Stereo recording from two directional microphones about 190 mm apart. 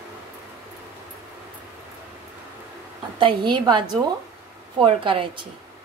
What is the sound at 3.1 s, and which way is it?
Speech, 25° right (ahead or behind).